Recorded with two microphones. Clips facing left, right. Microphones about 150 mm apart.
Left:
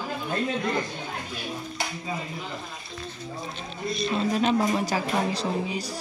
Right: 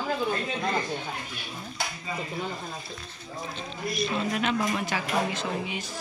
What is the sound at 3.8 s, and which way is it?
Speech, 30° left (ahead or behind).